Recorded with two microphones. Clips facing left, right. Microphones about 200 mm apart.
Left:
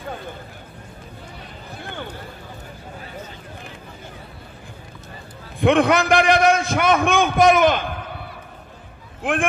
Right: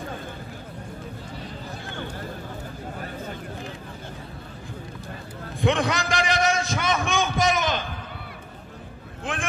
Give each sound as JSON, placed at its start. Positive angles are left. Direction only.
{"t": 5.6, "sound": "a man's voice", "side_deg": 60}